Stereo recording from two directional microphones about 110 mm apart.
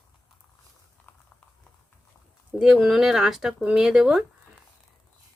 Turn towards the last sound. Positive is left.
turn(degrees=-5)  # may be behind; listen again after turning